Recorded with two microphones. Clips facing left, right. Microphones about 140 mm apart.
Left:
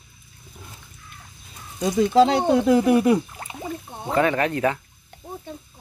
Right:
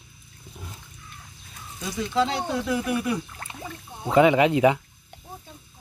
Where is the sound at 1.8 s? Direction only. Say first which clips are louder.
Left 8 dB; 40° left (ahead or behind).